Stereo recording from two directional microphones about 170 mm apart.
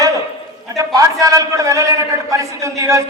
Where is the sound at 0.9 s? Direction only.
20° right (ahead or behind).